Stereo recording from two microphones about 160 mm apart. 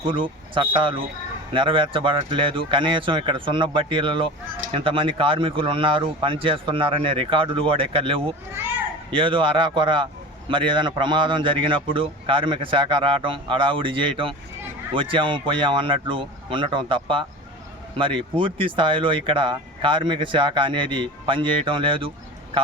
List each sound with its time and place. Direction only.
0.1 s speech: 30° right (ahead or behind)